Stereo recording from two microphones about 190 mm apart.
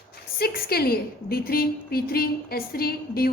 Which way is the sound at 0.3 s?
55° left (ahead or behind).